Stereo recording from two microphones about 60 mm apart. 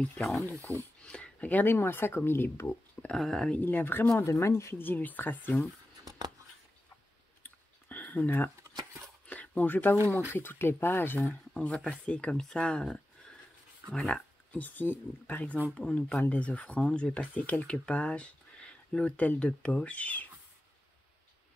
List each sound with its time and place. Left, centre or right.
0.2 s speech: centre
1.0 s a sound: centre
1.6 s speech: left
3.2 s speech: centre
3.5 s speech: left
4.2 s speech: left
4.7 s speech: left
7.4 s a sound: left
10.3 s speech: left
11.7 s speech: centre
15.7 s speech: centre